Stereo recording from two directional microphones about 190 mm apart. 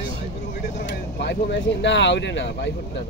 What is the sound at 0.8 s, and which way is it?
Speech, 65° left (ahead or behind).